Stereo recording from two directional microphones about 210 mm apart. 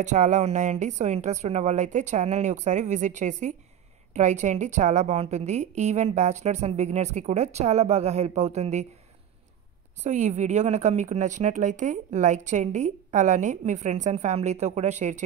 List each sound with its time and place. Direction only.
0.0 s speech: 35° right (ahead or behind)
10.0 s speech: 35° right (ahead or behind)